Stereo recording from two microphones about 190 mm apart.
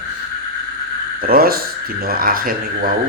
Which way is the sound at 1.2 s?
50° right (ahead or behind).